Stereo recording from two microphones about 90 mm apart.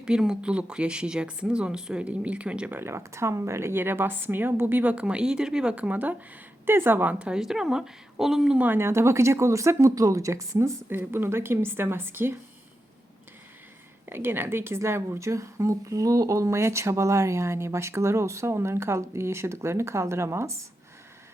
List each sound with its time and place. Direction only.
0.0 s speech: 10° right (ahead or behind)
8.6 s speech: 25° right (ahead or behind)
14.1 s a woman's voice: 25° right (ahead or behind)